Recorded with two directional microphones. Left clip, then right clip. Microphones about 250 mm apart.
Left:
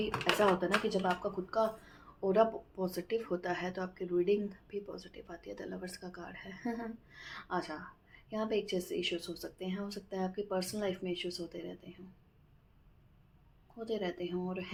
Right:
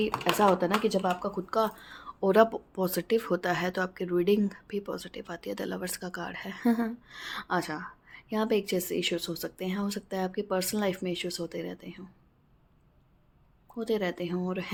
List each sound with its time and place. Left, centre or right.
0.9 s a woman's voice: right
13.7 s a woman's voice: right